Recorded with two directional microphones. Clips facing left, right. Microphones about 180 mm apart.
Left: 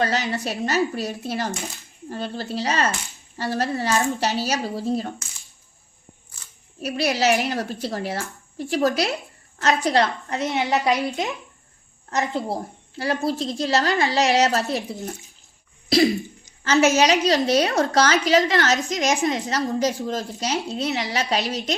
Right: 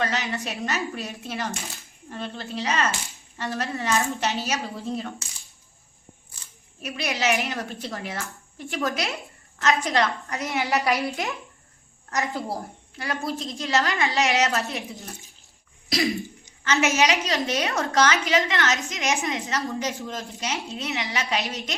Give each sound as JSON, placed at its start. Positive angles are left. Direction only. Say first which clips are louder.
{"t": 0.0, "sound": "a woman's voice", "louder": "left 4 dB", "side_deg": 35}
{"t": 6.8, "sound": "a woman's voice", "louder": "left 5 dB", "side_deg": 35}
{"t": 10.2, "sound": "a woman's voice", "louder": "left 4 dB", "side_deg": 25}
{"t": 16.6, "sound": "a woman's voice", "louder": "left 5 dB", "side_deg": 35}